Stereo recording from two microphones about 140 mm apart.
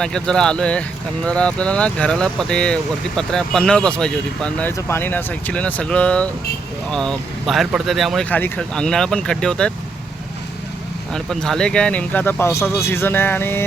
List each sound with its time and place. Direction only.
0.0 s speech: 5° left (ahead or behind)
8.3 s speech: 10° left (ahead or behind)
11.1 s speech: 5° left (ahead or behind)